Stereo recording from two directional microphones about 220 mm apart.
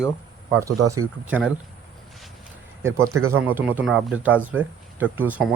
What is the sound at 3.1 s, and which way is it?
Speech, 75° right (ahead or behind).